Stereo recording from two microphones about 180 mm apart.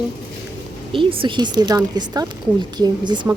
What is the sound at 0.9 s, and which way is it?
Speech, 30° right (ahead or behind).